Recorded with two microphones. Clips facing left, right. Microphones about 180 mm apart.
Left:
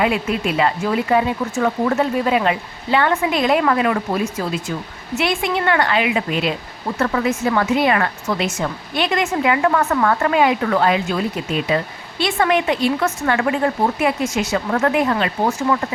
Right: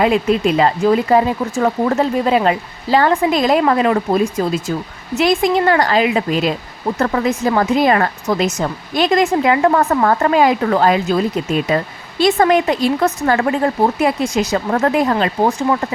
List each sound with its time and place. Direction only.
0.0 s speech: 35° right (ahead or behind)
12.2 s speech: 40° right (ahead or behind)